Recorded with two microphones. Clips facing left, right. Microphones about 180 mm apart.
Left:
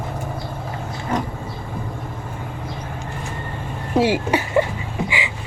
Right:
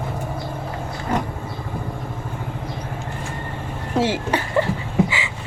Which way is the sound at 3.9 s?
10° left (ahead or behind).